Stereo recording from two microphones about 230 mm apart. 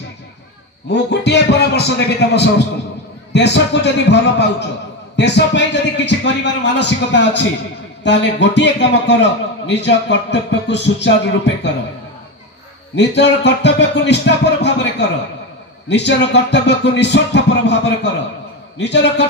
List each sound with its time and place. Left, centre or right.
0.8 s a man's voice: left
12.9 s a man's voice: left